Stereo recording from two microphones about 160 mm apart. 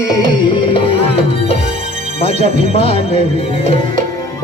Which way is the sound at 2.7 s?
40° left (ahead or behind).